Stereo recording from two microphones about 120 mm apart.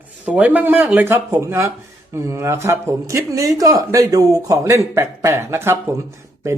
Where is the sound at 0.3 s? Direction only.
10° right (ahead or behind).